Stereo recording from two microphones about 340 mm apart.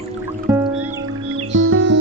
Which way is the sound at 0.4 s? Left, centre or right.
Centre.